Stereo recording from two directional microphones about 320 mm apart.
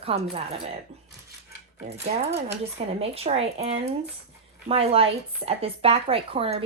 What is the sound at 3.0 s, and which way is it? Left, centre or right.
A woman's voice, centre.